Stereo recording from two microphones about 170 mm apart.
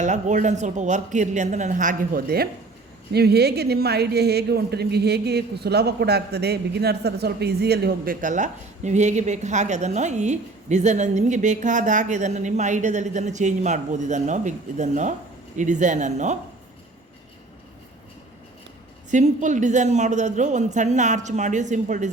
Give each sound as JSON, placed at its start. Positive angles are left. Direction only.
{"t": 0.0, "sound": "a woman's voice", "side_deg": -45}
{"t": 3.1, "sound": "a woman's voice", "side_deg": -70}
{"t": 19.1, "sound": "a woman's voice", "side_deg": -45}